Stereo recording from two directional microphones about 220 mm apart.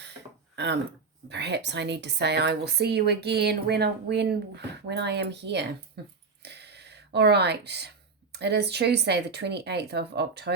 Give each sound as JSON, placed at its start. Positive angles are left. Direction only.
{"t": 0.5, "sound": "a woman's voice", "side_deg": -50}